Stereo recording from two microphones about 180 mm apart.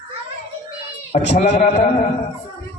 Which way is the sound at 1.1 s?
40° left (ahead or behind).